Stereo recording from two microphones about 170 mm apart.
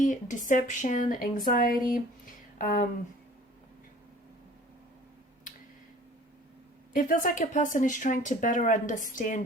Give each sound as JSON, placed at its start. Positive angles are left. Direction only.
{"t": 0.0, "sound": "speech", "side_deg": 50}
{"t": 6.9, "sound": "speech", "side_deg": 50}